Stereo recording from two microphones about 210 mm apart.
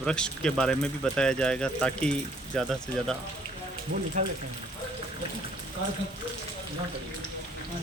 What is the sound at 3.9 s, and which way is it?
Speech, 50° right (ahead or behind).